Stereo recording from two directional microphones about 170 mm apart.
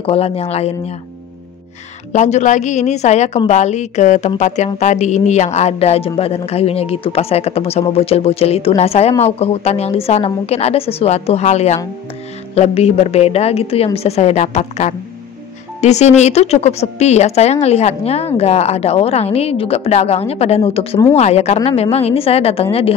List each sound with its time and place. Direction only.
0.0 s a woman's voice: 35° left (ahead or behind)
2.1 s a woman's voice: 45° left (ahead or behind)